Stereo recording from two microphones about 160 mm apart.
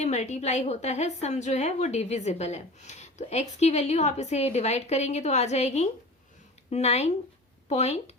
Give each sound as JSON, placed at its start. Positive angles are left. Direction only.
{"t": 0.0, "sound": "a woman's voice", "side_deg": 45}